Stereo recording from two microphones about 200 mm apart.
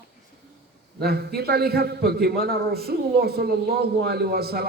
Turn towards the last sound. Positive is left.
turn(degrees=-50)  # may be behind; listen again after turning